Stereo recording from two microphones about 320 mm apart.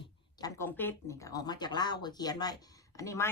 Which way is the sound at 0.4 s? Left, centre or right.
Centre.